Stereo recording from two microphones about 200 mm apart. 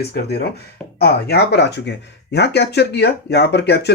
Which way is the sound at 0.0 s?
55° left (ahead or behind).